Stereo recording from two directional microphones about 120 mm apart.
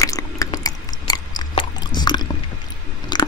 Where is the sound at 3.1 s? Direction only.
35° left (ahead or behind).